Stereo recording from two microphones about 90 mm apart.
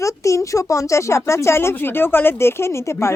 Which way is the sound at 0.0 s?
35° left (ahead or behind).